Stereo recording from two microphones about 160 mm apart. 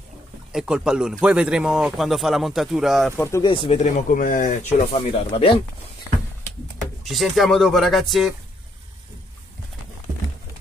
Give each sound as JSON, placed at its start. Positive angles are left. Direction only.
{"t": 0.5, "sound": "speech", "side_deg": -5}
{"t": 3.2, "sound": "speech", "side_deg": 15}
{"t": 3.4, "sound": "speech", "side_deg": 35}
{"t": 3.8, "sound": "speech", "side_deg": 55}
{"t": 4.9, "sound": "speech", "side_deg": 35}
{"t": 6.8, "sound": "speech", "side_deg": 0}